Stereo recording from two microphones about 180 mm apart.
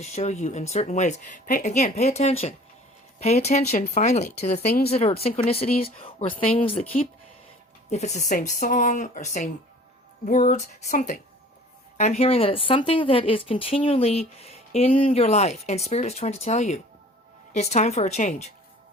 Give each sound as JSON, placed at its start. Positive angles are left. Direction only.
{"t": 0.0, "sound": "speech", "side_deg": 35}
{"t": 4.6, "sound": "speech", "side_deg": 60}
{"t": 4.9, "sound": "speech", "side_deg": 35}